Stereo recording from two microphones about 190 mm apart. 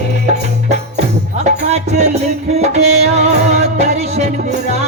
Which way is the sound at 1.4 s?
35° right (ahead or behind).